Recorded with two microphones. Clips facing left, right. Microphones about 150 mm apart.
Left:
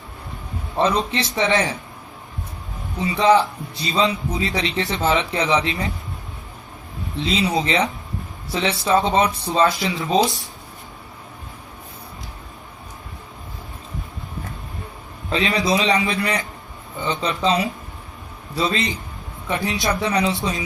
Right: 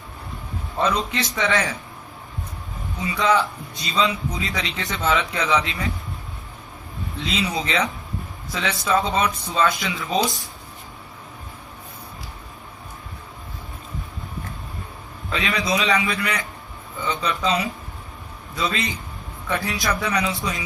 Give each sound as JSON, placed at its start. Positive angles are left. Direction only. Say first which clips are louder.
{"t": 0.8, "sound": "speech", "louder": "left 3 dB", "side_deg": 25}
{"t": 3.0, "sound": "speech", "louder": "left 4 dB", "side_deg": 25}
{"t": 7.2, "sound": "speech", "louder": "left 5 dB", "side_deg": 25}
{"t": 15.3, "sound": "speech", "louder": "left 4 dB", "side_deg": 30}